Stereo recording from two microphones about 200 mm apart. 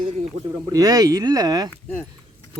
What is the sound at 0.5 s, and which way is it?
Speech, 20° right (ahead or behind).